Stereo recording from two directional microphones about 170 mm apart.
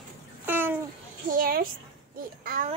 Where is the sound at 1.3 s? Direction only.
55° right (ahead or behind).